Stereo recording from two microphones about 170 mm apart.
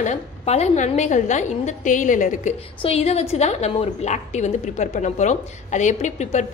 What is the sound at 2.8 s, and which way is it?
A woman's voice, 35° left (ahead or behind).